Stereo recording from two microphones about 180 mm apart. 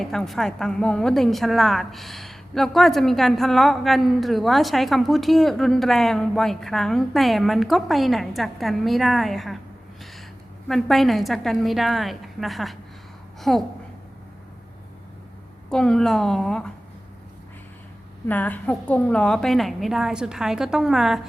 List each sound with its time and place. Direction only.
0.0 s a woman's voice: centre (ahead or behind)
10.7 s a woman's voice: centre (ahead or behind)
15.7 s a woman's voice: 5° left (ahead or behind)
18.3 s a woman's voice: 10° left (ahead or behind)